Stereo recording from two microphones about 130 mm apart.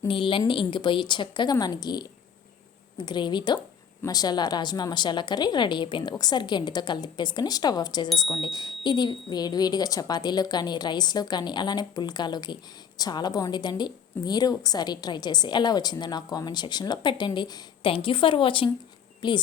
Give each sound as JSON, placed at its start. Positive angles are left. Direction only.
{"t": 0.1, "sound": "a woman's voice", "side_deg": 40}